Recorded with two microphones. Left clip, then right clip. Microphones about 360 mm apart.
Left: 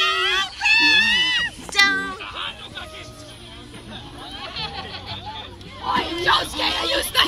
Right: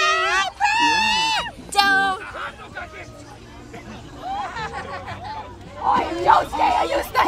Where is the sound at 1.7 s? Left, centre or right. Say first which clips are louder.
Right 2 dB; centre.